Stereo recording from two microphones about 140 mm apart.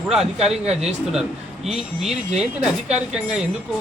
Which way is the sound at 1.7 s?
5° right (ahead or behind).